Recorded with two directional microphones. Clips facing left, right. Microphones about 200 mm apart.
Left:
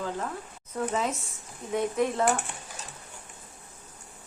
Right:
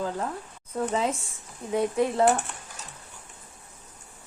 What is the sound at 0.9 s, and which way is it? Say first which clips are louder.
Speech: right 3 dB; 30° right (ahead or behind).